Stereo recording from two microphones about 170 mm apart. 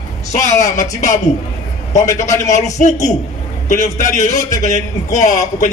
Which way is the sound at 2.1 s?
45° left (ahead or behind).